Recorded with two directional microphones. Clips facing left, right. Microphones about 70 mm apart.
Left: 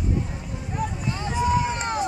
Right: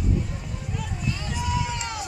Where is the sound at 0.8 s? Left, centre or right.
Left.